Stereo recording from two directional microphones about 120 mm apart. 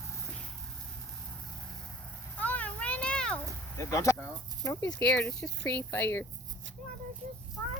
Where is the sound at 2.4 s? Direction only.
10° left (ahead or behind).